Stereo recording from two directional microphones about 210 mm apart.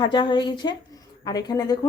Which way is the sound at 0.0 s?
20° left (ahead or behind).